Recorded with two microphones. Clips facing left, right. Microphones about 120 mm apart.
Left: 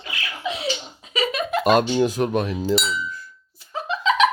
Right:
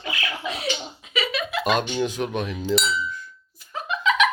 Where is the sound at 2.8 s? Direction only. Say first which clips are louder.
Right 1 dB; 10° left (ahead or behind).